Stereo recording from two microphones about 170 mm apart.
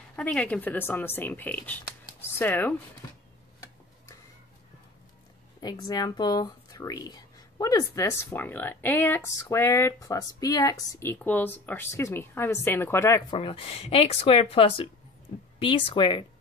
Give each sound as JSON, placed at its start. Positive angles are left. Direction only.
{"t": 0.1, "sound": "speech", "side_deg": 5}
{"t": 2.0, "sound": "a sound", "side_deg": 10}
{"t": 5.6, "sound": "speech", "side_deg": 25}
{"t": 13.3, "sound": "speech", "side_deg": 30}